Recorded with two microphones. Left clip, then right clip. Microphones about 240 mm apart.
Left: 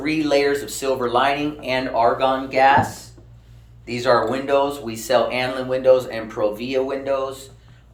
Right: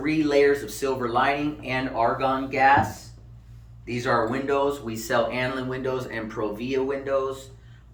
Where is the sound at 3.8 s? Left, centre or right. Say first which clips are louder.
Left 6 dB; centre.